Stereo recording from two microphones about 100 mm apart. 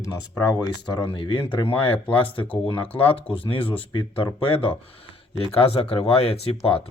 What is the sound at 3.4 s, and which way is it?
Speech, 60° left (ahead or behind).